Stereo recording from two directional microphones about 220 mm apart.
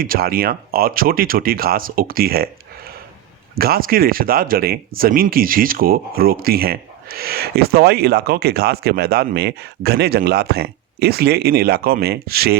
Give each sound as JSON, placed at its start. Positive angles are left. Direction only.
{"t": 0.0, "sound": "speech", "side_deg": -40}